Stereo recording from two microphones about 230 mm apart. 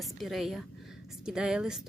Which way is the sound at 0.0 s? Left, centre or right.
Centre.